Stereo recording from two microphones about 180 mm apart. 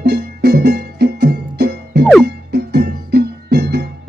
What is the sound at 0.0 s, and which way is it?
Music, 65° right (ahead or behind).